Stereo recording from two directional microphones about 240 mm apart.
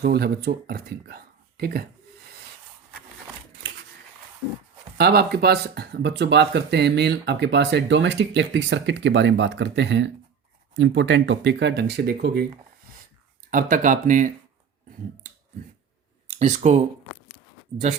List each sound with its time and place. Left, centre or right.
0.0 s speech: right
4.9 s speech: right
13.5 s speech: right
16.4 s speech: right